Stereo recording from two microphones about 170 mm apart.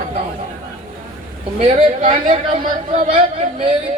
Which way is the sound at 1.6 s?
40° right (ahead or behind).